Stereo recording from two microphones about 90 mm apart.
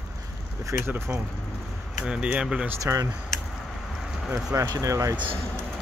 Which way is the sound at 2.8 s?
40° right (ahead or behind).